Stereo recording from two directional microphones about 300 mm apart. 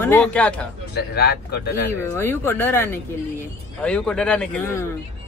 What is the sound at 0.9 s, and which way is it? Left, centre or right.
Speech, left.